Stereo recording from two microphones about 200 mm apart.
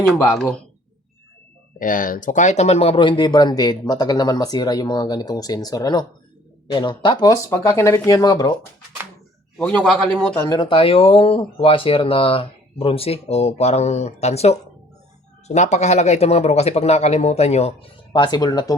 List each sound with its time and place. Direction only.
0.0 s speech: 15° left (ahead or behind)
0.3 s speech: centre (ahead or behind)
1.8 s speech: 40° left (ahead or behind); by 8.5 s 20° left (ahead or behind)
9.6 s speech: 5° left (ahead or behind)